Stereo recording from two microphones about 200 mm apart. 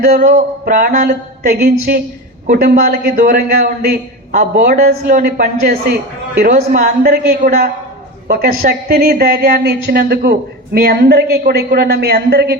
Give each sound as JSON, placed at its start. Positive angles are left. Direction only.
{"t": 0.0, "sound": "speech", "side_deg": -40}
{"t": 6.4, "sound": "speech", "side_deg": -40}